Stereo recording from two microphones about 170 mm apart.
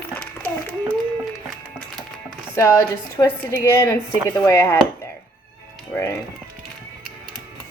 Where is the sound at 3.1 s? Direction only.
20° left (ahead or behind).